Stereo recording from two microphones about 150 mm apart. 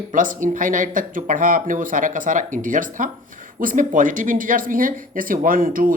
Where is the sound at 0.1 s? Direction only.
60° right (ahead or behind).